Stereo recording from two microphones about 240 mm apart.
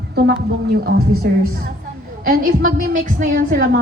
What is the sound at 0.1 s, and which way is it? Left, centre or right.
A woman's voice, right.